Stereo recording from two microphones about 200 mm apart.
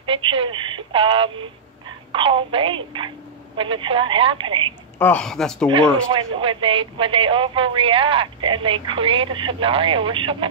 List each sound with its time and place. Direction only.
0.0 s telephone: 25° right (ahead or behind)
2.1 s speech: 25° right (ahead or behind)
4.9 s a woman's voice: 10° left (ahead or behind)
6.1 s speech: 25° right (ahead or behind)